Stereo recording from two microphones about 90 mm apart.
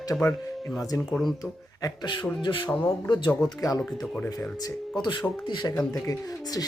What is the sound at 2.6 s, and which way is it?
Speech, 15° left (ahead or behind).